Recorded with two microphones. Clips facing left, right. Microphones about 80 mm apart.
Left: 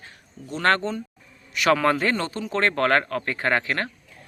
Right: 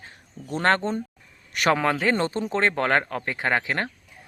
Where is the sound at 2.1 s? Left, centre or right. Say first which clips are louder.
Right 3 dB; right.